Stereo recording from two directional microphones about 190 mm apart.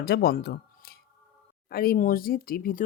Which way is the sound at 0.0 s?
55° left (ahead or behind).